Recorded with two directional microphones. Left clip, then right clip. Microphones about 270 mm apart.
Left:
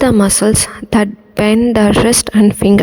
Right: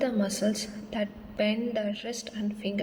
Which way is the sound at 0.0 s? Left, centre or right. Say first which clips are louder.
Left 16 dB; left.